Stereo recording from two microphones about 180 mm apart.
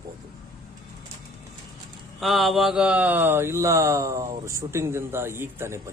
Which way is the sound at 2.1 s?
Centre (ahead or behind).